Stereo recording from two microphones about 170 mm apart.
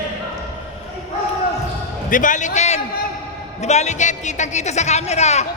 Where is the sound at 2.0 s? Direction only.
50° left (ahead or behind).